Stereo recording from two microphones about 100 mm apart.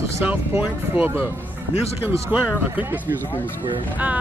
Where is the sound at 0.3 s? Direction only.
15° right (ahead or behind).